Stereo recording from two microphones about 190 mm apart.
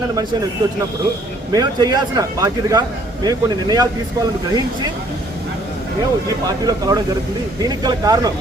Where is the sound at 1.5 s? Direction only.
20° right (ahead or behind).